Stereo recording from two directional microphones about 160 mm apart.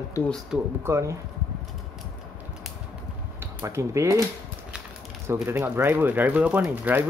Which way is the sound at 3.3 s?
20° right (ahead or behind).